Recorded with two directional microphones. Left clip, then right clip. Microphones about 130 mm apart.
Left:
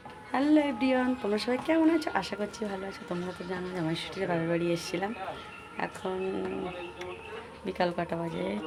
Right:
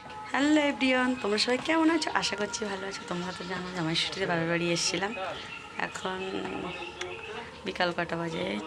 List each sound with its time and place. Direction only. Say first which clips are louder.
0.3 s speech: even; 20° left (ahead or behind)
3.8 s speech: right 5 dB; 20° left (ahead or behind)
7.6 s speech: right 1 dB; 20° left (ahead or behind)